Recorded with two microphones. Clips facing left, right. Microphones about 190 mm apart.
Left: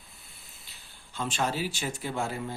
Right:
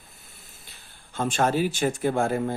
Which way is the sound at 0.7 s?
50° right (ahead or behind).